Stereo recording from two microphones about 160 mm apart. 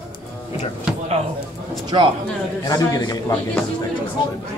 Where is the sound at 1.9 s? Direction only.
30° right (ahead or behind).